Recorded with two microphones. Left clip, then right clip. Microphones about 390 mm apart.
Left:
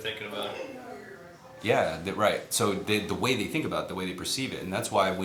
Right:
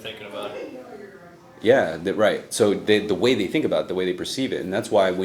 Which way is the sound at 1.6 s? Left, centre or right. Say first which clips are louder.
Right 8 dB; left.